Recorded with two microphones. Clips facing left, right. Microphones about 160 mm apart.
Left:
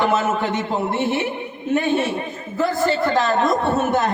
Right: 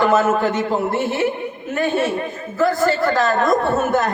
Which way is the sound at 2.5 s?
20° left (ahead or behind).